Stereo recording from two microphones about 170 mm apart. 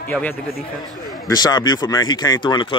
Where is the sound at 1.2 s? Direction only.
25° left (ahead or behind).